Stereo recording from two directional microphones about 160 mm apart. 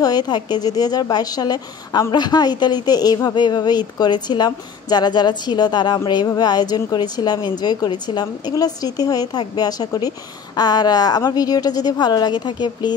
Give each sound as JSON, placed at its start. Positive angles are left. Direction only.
{"t": 0.0, "sound": "a woman's voice", "side_deg": 25}